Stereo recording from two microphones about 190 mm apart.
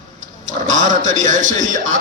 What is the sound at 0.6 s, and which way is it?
A man's voice, 40° right (ahead or behind).